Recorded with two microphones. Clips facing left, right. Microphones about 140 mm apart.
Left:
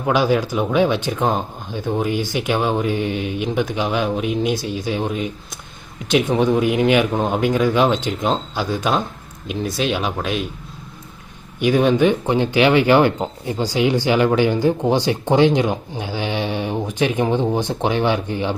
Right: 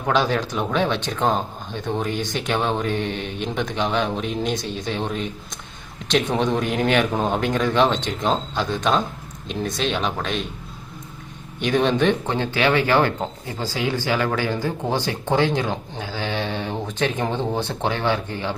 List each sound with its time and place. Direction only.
0.1 s speech: 10° left (ahead or behind)
11.6 s speech: 5° left (ahead or behind)